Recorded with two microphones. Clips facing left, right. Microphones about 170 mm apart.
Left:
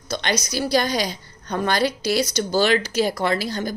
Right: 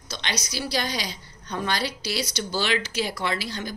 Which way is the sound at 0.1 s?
45° left (ahead or behind).